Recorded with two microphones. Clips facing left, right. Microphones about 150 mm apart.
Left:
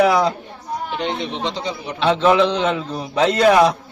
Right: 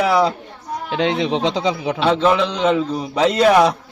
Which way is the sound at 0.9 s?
90° right.